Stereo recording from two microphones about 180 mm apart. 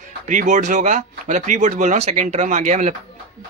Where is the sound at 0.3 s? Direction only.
45° right (ahead or behind).